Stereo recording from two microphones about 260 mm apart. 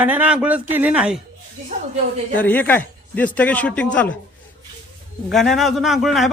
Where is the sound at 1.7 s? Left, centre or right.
Right.